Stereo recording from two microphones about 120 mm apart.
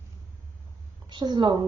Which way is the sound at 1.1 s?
40° right (ahead or behind).